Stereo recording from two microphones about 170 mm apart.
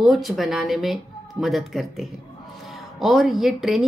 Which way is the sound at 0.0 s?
Centre (ahead or behind).